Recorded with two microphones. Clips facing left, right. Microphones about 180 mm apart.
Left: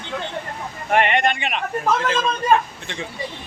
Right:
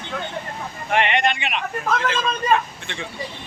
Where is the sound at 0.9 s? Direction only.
45° left (ahead or behind).